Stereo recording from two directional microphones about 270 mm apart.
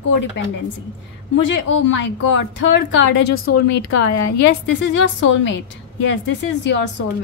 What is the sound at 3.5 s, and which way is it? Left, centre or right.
Speech, left.